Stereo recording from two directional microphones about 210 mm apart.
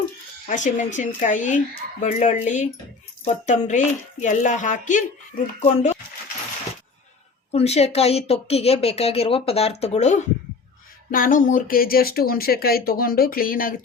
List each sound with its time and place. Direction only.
0.4 s speech: 35° left (ahead or behind)
7.5 s speech: 30° left (ahead or behind)